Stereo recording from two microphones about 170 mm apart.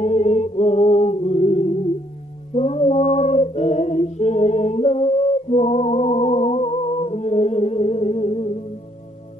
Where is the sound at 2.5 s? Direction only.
40° left (ahead or behind).